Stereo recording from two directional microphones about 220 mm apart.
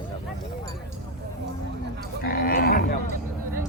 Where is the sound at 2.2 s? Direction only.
40° left (ahead or behind).